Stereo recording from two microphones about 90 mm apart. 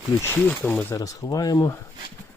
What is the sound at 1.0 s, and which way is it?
Speech, 45° left (ahead or behind).